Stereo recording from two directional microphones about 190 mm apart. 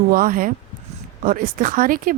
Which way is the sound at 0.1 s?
50° right (ahead or behind).